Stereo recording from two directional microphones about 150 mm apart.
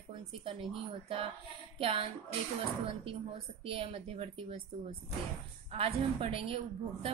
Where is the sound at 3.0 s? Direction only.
35° right (ahead or behind).